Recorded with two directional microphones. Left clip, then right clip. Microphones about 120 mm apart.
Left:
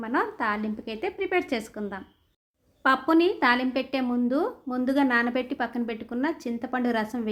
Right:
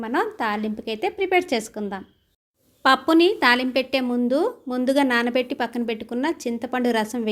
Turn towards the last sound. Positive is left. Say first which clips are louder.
# right 5 dB
turn(degrees=-15)  # may be behind; listen again after turning